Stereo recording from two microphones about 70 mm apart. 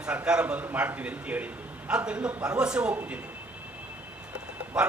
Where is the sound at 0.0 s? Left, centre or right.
Centre.